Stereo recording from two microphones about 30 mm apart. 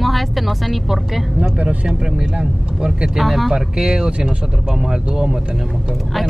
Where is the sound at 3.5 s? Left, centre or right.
Right.